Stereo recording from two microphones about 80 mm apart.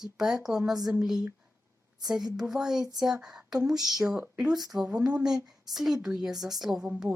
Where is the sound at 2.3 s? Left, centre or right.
Centre.